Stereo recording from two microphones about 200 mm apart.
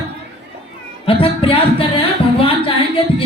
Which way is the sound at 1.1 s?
25° left (ahead or behind).